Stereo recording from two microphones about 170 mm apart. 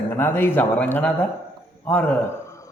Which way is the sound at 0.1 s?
10° left (ahead or behind).